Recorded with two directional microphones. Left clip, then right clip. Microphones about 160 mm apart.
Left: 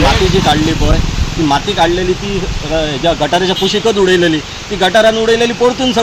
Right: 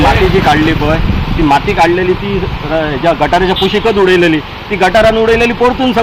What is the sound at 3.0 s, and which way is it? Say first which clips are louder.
Speech: right 3 dB; 10° right (ahead or behind).